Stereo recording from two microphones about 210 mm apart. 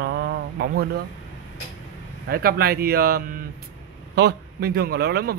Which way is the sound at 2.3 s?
45° right (ahead or behind).